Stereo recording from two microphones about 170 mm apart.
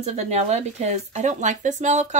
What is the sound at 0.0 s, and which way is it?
Speech, 40° right (ahead or behind).